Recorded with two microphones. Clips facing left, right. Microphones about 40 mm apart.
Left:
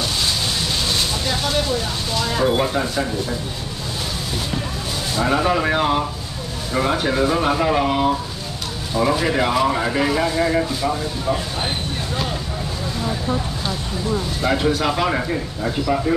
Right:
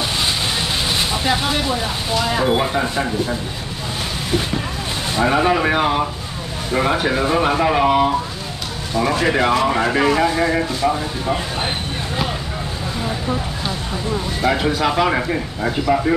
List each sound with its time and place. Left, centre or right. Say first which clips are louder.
0.6 s speech: right 2 dB; right
5.1 s speech: right 2 dB; right
9.3 s speech: right 2 dB; centre
14.4 s speech: right 2 dB; centre